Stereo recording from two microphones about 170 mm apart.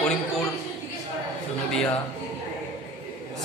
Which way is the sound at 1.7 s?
5° left (ahead or behind).